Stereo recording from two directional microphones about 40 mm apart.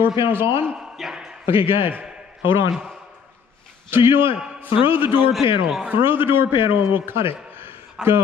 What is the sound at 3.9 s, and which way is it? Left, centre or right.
Speech, right.